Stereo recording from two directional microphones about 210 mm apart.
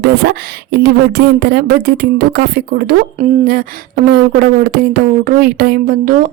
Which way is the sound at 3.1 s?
35° right (ahead or behind).